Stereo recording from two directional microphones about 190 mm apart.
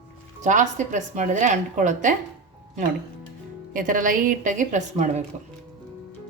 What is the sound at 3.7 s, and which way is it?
A woman's voice, 45° right (ahead or behind).